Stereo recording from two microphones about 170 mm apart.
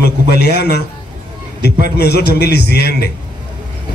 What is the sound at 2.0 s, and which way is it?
A man's voice, 70° left (ahead or behind).